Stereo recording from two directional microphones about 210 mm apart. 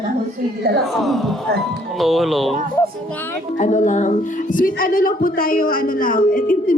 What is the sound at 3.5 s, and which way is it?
Speech, 35° left (ahead or behind).